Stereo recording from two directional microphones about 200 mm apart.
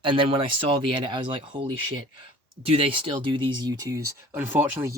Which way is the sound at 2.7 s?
25° right (ahead or behind).